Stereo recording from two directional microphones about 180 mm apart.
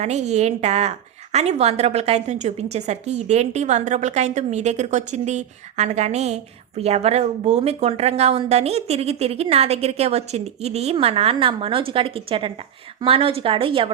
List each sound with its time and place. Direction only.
0.0 s a woman's voice: 40° right (ahead or behind)